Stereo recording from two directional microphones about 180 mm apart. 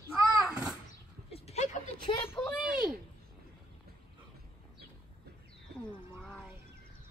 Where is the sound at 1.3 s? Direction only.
35° left (ahead or behind).